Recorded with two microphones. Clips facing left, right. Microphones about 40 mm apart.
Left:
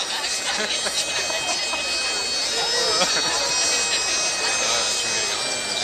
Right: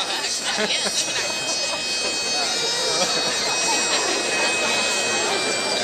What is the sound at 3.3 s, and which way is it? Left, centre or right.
Bagpipes, right.